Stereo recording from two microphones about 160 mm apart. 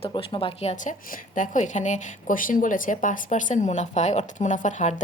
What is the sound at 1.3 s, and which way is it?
A woman's voice, 50° left (ahead or behind).